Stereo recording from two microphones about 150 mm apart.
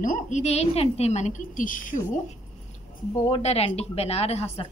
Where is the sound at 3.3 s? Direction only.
40° left (ahead or behind).